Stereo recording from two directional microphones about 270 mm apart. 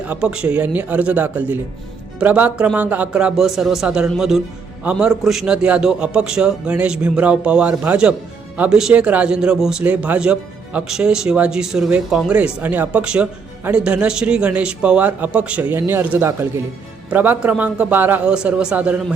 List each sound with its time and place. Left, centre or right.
0.1 s a man's voice: centre